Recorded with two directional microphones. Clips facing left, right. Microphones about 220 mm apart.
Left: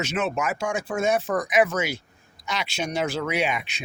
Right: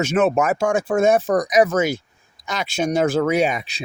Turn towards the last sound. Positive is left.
turn(degrees=-40)  # may be behind; listen again after turning